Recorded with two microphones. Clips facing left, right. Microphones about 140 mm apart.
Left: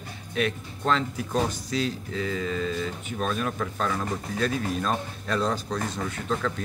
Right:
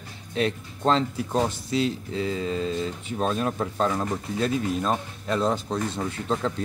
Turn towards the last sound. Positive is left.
turn(degrees=-30)  # may be behind; listen again after turning